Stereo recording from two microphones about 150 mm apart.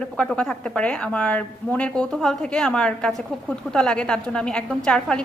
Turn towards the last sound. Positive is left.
turn(degrees=5)  # may be behind; listen again after turning